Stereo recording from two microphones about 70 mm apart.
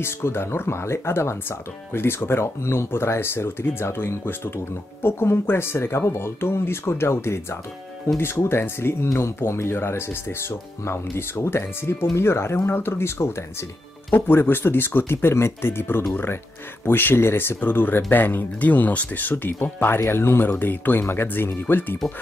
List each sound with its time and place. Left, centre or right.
0.0 s speech: left